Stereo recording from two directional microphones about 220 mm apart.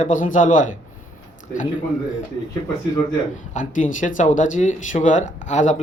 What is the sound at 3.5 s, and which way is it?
Speech, 35° left (ahead or behind).